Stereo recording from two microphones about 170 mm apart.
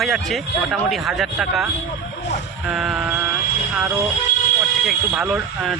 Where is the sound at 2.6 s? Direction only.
5° right (ahead or behind).